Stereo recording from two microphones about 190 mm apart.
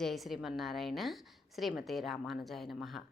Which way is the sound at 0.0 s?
Centre (ahead or behind).